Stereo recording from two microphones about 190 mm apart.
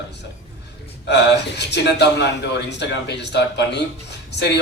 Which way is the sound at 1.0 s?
65° left (ahead or behind).